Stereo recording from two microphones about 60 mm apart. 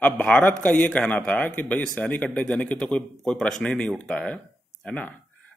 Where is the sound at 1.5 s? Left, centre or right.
Left.